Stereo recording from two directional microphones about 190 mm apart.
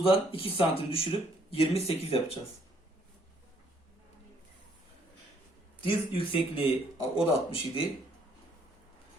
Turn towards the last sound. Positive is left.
turn(degrees=30)  # may be behind; listen again after turning